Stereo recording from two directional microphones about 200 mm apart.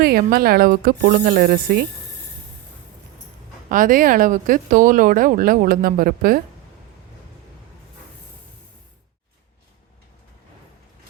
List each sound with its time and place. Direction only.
0.0 s speech: 50° right (ahead or behind)
3.7 s speech: 45° right (ahead or behind)